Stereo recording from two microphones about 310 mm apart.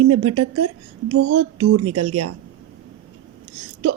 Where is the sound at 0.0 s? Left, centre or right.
Right.